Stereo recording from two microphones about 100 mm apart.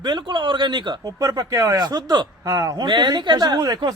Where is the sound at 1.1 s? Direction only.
35° right (ahead or behind).